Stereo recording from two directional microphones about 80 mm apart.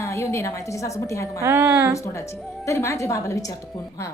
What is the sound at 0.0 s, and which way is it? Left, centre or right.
A woman's voice, left.